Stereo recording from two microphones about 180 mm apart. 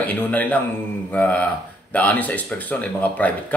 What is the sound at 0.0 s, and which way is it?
A man's voice, 10° left (ahead or behind).